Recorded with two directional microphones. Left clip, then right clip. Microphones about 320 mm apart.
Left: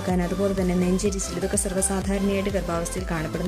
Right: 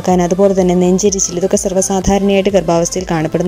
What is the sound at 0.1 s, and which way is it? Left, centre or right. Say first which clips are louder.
Speech: right 15 dB; right.